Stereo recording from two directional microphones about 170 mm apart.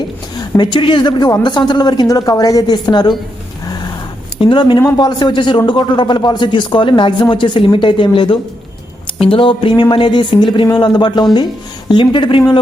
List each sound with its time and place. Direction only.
0.3 s speech: 25° left (ahead or behind)
4.4 s speech: 30° left (ahead or behind)